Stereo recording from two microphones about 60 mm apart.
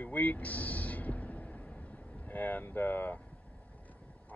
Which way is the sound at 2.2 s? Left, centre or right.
Left.